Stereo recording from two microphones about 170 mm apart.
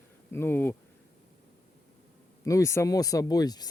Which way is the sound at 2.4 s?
20° left (ahead or behind).